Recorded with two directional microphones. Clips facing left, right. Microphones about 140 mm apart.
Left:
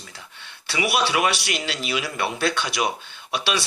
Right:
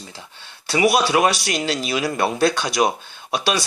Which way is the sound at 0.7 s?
40° right (ahead or behind).